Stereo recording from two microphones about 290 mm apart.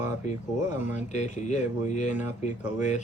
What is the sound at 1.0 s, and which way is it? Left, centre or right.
Speech, left.